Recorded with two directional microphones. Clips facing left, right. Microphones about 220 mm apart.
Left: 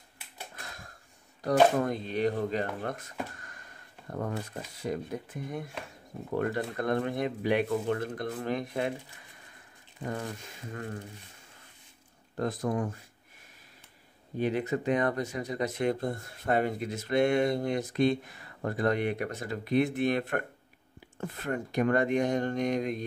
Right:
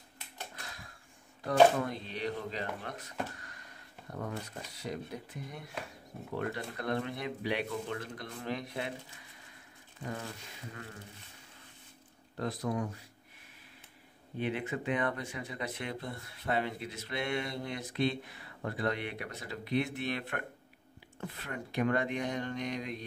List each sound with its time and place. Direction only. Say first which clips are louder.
1.4 s speech: left 1 dB; 45° left (ahead or behind)
10.0 s speech: left 5 dB; 50° left (ahead or behind)
12.4 s speech: left 4 dB; 50° left (ahead or behind)
14.4 s speech: left 6 dB; 40° left (ahead or behind)